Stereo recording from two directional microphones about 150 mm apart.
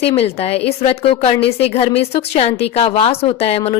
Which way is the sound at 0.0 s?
40° left (ahead or behind).